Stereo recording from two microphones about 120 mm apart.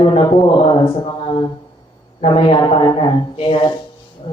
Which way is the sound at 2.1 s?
50° left (ahead or behind).